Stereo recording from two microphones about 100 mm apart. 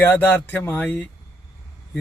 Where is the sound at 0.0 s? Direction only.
20° left (ahead or behind).